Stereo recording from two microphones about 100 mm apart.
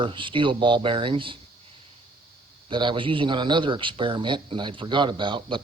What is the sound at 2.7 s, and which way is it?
Speech, 50° right (ahead or behind).